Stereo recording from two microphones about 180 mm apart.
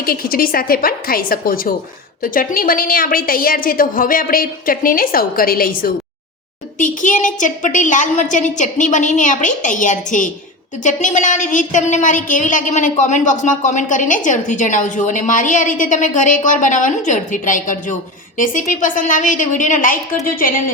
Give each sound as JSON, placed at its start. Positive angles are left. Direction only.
{"t": 0.0, "sound": "a woman's voice", "side_deg": 55}